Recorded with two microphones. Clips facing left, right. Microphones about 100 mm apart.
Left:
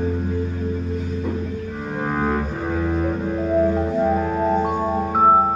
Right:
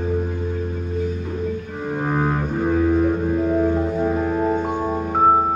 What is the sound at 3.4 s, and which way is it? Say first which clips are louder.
Music: left 3 dB; 10° right (ahead or behind).